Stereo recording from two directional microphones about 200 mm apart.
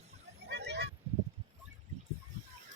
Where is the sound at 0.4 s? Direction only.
55° right (ahead or behind).